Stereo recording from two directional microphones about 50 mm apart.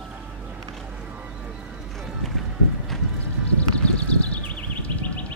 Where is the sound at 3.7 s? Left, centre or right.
Left.